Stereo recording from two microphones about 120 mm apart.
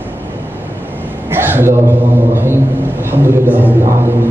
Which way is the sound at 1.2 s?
20° right (ahead or behind).